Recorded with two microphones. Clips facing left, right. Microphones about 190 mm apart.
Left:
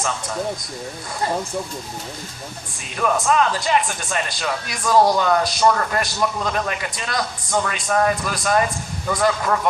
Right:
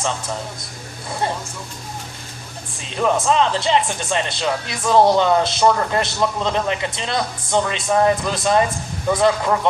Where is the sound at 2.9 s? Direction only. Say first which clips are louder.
Right 2 dB; 25° right (ahead or behind).